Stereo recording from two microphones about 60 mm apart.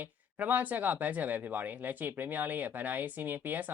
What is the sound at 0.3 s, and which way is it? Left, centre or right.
Speech, right.